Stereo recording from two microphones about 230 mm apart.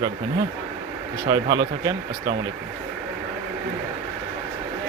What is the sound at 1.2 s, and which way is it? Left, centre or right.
Speech, centre.